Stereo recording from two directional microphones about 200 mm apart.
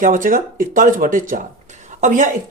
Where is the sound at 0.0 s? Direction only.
40° right (ahead or behind).